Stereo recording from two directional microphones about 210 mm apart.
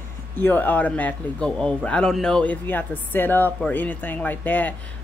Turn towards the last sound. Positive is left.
turn(degrees=10)  # may be behind; listen again after turning